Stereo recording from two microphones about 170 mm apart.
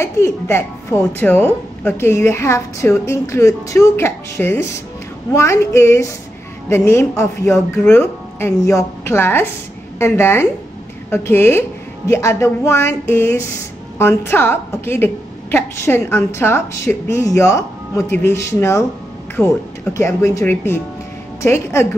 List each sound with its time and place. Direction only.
0.0 s a woman's voice: 15° left (ahead or behind)